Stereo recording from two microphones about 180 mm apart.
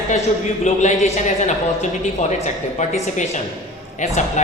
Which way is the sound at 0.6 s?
40° left (ahead or behind).